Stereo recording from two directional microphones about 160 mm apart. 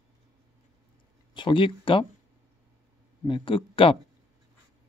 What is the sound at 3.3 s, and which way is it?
Speech, 35° left (ahead or behind).